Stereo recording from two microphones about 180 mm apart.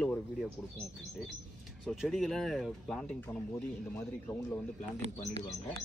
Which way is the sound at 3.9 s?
15° left (ahead or behind).